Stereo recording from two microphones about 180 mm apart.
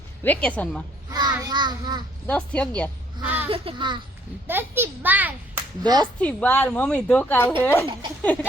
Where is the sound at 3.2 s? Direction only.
10° right (ahead or behind).